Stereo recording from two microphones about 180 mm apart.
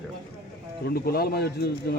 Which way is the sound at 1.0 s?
60° left (ahead or behind).